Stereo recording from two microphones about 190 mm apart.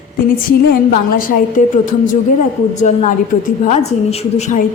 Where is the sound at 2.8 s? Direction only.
40° left (ahead or behind).